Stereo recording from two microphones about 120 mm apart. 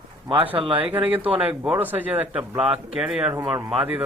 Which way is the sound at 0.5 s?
45° right (ahead or behind).